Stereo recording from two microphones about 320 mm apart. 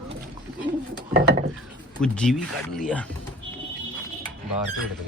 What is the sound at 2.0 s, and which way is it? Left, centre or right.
Speech, centre.